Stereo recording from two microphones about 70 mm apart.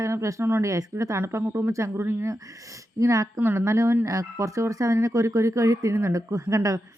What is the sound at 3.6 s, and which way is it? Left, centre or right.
Speech, right.